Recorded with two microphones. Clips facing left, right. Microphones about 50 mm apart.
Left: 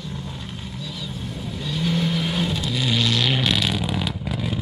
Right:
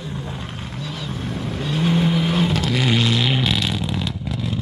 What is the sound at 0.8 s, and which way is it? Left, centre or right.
Vehicle, right.